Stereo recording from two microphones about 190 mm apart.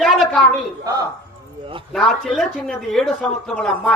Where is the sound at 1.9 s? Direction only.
Centre (ahead or behind).